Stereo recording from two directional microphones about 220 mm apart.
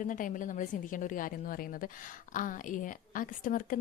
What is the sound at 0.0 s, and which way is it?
A woman's voice, 35° left (ahead or behind).